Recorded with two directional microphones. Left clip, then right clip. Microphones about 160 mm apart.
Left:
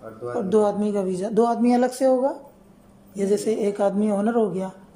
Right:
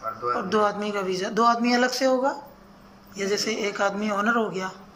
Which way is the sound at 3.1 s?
40° left (ahead or behind).